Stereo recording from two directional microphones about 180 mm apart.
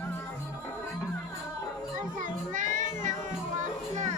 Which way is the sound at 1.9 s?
45° right (ahead or behind).